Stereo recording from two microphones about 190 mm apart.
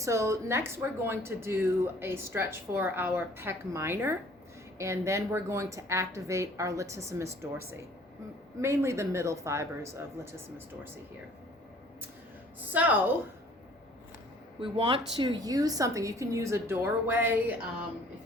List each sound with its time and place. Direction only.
0.0 s speech: 15° right (ahead or behind)
8.6 s speech: 15° right (ahead or behind)
12.7 s speech: 10° right (ahead or behind)
14.6 s speech: 25° right (ahead or behind); by 17.5 s 10° right (ahead or behind)